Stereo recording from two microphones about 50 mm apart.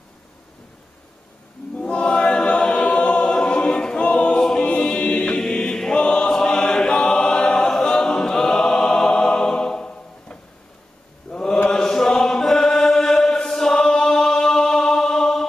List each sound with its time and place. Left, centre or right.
1.8 s choir: left
11.3 s mantra: centre
11.7 s chant: centre